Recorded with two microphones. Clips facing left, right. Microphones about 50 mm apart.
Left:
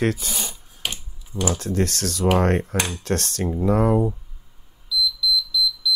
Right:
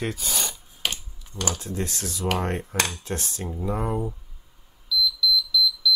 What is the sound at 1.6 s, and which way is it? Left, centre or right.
Speech, left.